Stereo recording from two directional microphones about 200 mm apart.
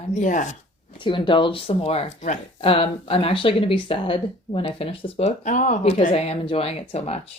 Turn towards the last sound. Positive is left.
turn(degrees=30)  # may be behind; listen again after turning